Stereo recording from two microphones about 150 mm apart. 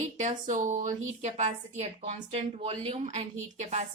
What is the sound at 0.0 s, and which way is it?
A woman's voice, 50° right (ahead or behind).